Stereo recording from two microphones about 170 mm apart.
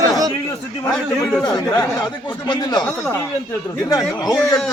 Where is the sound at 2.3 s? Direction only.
25° left (ahead or behind).